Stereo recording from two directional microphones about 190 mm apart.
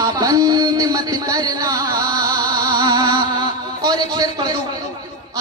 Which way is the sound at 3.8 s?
20° right (ahead or behind).